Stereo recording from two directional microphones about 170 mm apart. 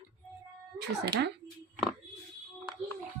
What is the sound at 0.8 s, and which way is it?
Speech, 75° right (ahead or behind).